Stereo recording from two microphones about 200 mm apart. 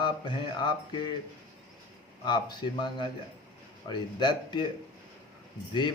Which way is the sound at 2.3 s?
20° left (ahead or behind).